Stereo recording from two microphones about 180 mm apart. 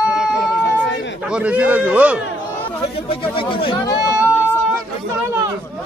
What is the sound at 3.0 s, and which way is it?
Speech, 30° left (ahead or behind).